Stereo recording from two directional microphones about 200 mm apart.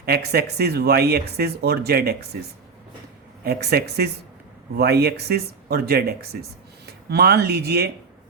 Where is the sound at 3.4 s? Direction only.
55° right (ahead or behind).